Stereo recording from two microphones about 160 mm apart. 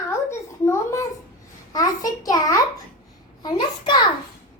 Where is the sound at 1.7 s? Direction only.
25° left (ahead or behind).